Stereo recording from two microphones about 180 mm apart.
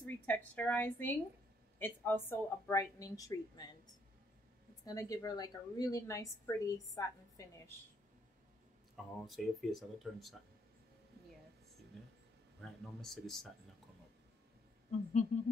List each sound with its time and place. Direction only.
0.0 s a woman's voice: 10° left (ahead or behind)
4.8 s a woman's voice: 20° left (ahead or behind)
8.9 s speech: centre (ahead or behind)
12.8 s speech: centre (ahead or behind)
15.3 s a sound: 40° left (ahead or behind)